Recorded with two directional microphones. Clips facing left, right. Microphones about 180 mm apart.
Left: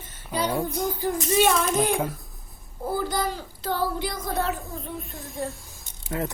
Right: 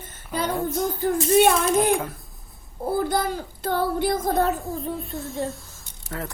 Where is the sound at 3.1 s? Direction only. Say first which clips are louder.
Right 3 dB; 50° right (ahead or behind).